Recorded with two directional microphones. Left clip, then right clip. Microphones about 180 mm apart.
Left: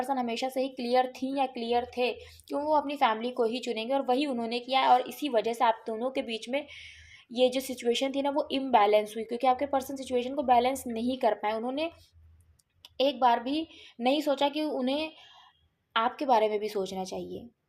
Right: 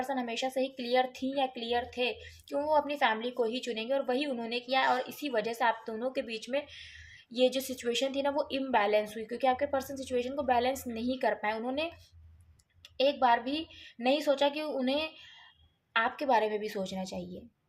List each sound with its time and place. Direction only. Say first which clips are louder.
0.0 s a woman's voice: left 3 dB; 30° left (ahead or behind)
13.0 s a woman's voice: left 1 dB; 30° left (ahead or behind)